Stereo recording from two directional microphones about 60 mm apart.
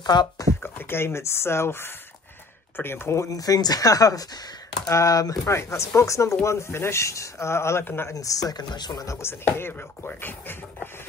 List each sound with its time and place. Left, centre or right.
0.6 s speech: left
3.3 s speech: left
4.8 s speech: left
8.1 s speech: left
9.2 s speech: left